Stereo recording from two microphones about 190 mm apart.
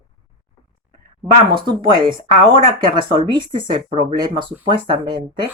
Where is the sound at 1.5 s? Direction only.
25° right (ahead or behind).